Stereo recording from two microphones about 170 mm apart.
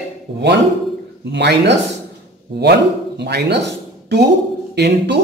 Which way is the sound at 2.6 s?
80° right.